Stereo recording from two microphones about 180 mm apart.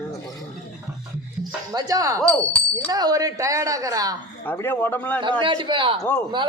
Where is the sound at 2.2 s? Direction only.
5° left (ahead or behind).